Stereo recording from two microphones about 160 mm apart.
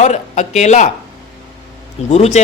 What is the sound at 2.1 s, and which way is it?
Speech, 45° left (ahead or behind).